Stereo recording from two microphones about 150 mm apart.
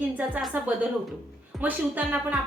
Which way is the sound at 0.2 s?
10° right (ahead or behind).